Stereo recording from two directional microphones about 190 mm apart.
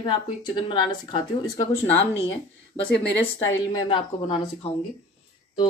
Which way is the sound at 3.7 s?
25° left (ahead or behind).